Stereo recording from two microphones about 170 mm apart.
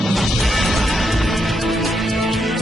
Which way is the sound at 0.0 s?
Centre (ahead or behind).